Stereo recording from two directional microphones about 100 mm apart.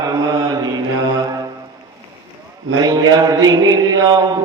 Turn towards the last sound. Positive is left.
turn(degrees=-40)  # may be behind; listen again after turning